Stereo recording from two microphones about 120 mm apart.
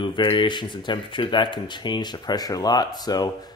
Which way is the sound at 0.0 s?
45° left (ahead or behind).